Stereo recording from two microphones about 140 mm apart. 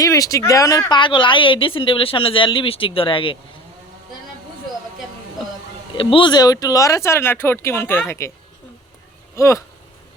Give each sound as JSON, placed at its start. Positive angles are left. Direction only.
{"t": 0.0, "sound": "a woman's voice", "side_deg": 25}
{"t": 6.0, "sound": "speech", "side_deg": 35}
{"t": 9.3, "sound": "speech", "side_deg": 20}